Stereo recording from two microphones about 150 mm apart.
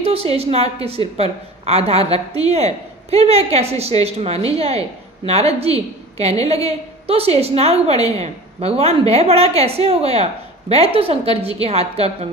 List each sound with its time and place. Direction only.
0.0 s a woman's voice: 40° right (ahead or behind)